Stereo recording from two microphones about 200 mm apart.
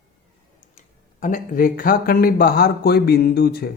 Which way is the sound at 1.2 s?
40° left (ahead or behind).